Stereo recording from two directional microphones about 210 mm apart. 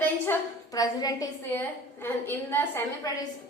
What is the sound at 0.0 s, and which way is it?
A woman's voice, 15° left (ahead or behind).